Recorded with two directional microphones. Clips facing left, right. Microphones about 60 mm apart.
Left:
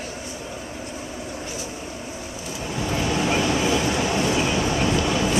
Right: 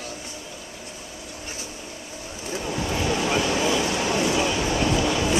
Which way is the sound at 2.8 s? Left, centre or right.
Left.